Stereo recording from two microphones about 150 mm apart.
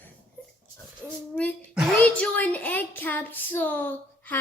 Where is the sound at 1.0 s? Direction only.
5° left (ahead or behind).